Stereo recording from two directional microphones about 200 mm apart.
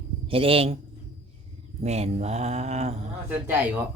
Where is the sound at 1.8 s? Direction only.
30° right (ahead or behind).